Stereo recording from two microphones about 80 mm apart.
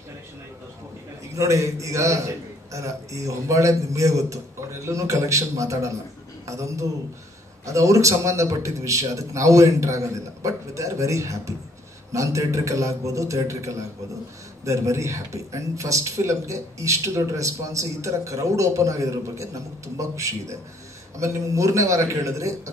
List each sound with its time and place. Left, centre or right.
1.3 s a man's voice: right